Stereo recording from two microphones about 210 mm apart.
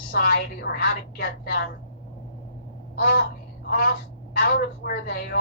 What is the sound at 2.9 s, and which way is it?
Speech, 50° left (ahead or behind).